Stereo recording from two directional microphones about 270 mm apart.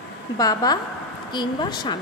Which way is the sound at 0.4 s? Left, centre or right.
Centre.